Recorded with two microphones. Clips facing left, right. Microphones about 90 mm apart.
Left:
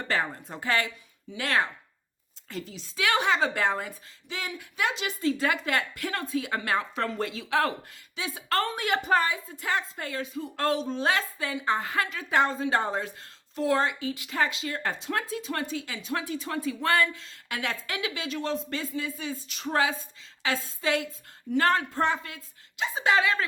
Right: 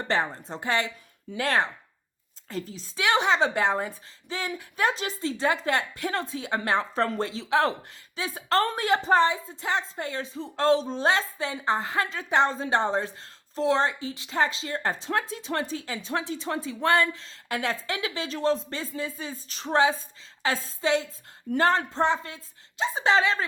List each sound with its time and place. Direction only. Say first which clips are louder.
0.1 s speech: right 2 dB; 25° right (ahead or behind)
1.4 s a woman's voice: right 2 dB; 35° right (ahead or behind)
3.0 s speech: right 2 dB; 20° right (ahead or behind)
17.2 s a woman's voice: right 4 dB; 35° right (ahead or behind)